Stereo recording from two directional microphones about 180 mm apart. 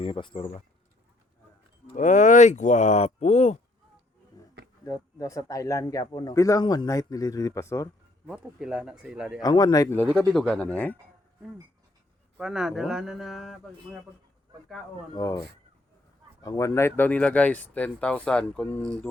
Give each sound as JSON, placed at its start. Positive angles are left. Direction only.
{"t": 0.0, "sound": "speech", "side_deg": 30}
{"t": 2.0, "sound": "speech", "side_deg": 45}
{"t": 4.9, "sound": "speech", "side_deg": 20}
{"t": 8.3, "sound": "a man's voice", "side_deg": -5}
{"t": 9.4, "sound": "speech", "side_deg": 20}
{"t": 12.4, "sound": "a man's voice", "side_deg": -5}
{"t": 15.1, "sound": "speech", "side_deg": 20}